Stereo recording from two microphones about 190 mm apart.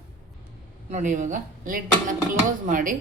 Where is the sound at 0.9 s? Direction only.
40° right (ahead or behind).